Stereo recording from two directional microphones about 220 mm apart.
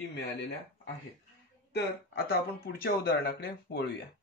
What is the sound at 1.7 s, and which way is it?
Speech, 45° left (ahead or behind).